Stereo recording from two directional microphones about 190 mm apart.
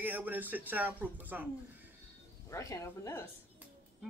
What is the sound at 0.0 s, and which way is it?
Speech, 10° right (ahead or behind).